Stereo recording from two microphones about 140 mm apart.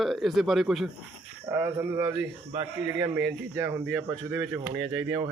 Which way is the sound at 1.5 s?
15° right (ahead or behind).